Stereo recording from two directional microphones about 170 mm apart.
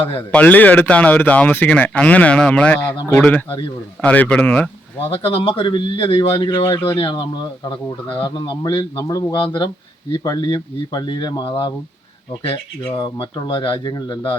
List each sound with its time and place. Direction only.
0.2 s speech: 10° left (ahead or behind)
5.1 s speech: 30° left (ahead or behind)
13.0 s speech: 25° left (ahead or behind)